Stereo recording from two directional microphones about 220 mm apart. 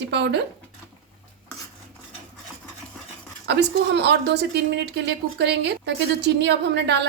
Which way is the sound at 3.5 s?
50° right (ahead or behind).